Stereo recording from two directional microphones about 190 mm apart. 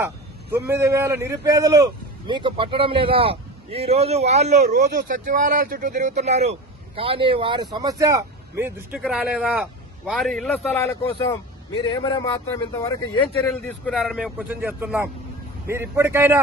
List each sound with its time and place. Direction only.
0.5 s a man's voice: 15° right (ahead or behind); by 10.8 s centre (ahead or behind)
11.9 s a man's voice: 25° left (ahead or behind)
13.8 s speech: centre (ahead or behind)